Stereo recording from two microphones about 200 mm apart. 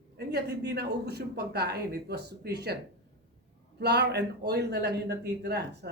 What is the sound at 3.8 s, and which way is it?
A man's voice, 55° right (ahead or behind).